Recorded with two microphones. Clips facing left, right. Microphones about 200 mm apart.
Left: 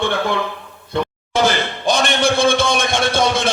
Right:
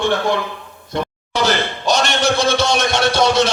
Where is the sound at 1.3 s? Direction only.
55° left (ahead or behind).